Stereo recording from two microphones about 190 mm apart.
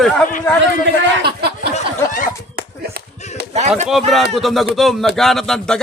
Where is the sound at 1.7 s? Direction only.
45° left (ahead or behind).